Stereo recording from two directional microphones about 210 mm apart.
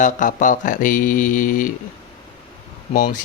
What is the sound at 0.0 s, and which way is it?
Speech, 40° left (ahead or behind).